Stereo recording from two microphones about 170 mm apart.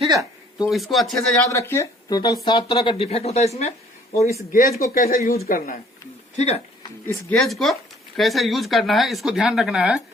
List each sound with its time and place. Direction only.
0.0 s a sound: 20° right (ahead or behind)
0.6 s speech: centre (ahead or behind)
1.5 s speech: 15° left (ahead or behind); by 3.5 s 40° left (ahead or behind)
3.6 s a sound: 40° left (ahead or behind)
4.8 s speech: 55° left (ahead or behind)
6.3 s speech: 40° left (ahead or behind)
7.3 s speech: centre (ahead or behind)